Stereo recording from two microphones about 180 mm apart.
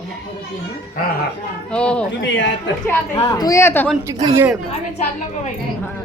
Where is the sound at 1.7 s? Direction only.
5° left (ahead or behind).